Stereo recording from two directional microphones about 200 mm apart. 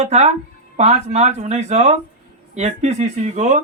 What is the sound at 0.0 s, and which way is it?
Speech, 35° right (ahead or behind).